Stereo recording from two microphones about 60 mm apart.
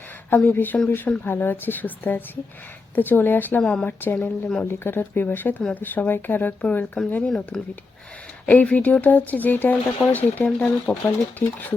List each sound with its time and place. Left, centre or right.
0.3 s speech: left
3.6 s speech: centre
3.8 s speech: left
4.2 s speech: centre
4.6 s speech: left
7.3 s speech: centre
8.4 s speech: left